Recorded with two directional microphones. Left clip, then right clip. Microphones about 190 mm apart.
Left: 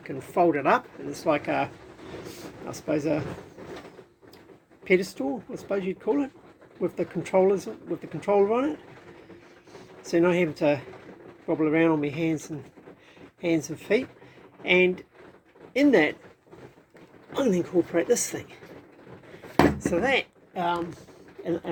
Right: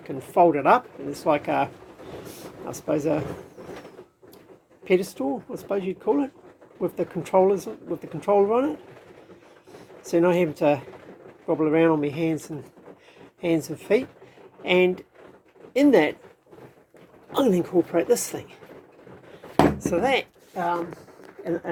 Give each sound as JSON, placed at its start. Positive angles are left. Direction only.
{"t": 0.1, "sound": "speech", "side_deg": -5}
{"t": 3.2, "sound": "pigeon", "side_deg": -15}
{"t": 4.8, "sound": "speech", "side_deg": 0}
{"t": 10.1, "sound": "speech", "side_deg": -5}
{"t": 13.7, "sound": "speech", "side_deg": -5}
{"t": 17.3, "sound": "speech", "side_deg": -15}
{"t": 17.9, "sound": "speech", "side_deg": 0}
{"t": 19.8, "sound": "speech", "side_deg": 0}